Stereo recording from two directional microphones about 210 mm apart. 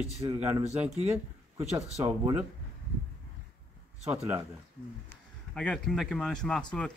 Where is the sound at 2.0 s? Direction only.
10° right (ahead or behind).